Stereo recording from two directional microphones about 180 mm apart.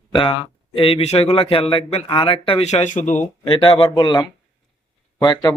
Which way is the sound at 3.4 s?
25° left (ahead or behind).